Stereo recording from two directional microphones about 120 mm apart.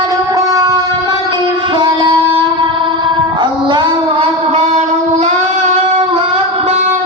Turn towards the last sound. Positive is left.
turn(degrees=-70)  # may be behind; listen again after turning